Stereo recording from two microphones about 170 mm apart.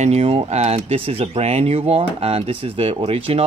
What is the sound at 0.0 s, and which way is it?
Speech, 35° right (ahead or behind).